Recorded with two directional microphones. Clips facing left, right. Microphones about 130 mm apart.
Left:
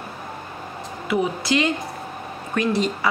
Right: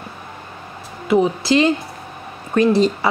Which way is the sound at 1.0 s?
30° right (ahead or behind).